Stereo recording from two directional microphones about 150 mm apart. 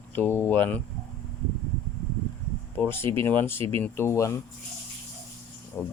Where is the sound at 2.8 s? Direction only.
15° left (ahead or behind).